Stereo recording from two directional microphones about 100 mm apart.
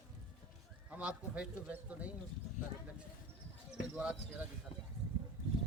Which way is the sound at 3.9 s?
15° right (ahead or behind).